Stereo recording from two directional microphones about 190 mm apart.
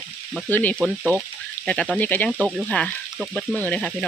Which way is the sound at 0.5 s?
10° left (ahead or behind).